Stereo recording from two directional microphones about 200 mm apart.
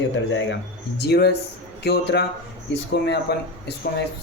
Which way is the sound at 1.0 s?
55° left (ahead or behind).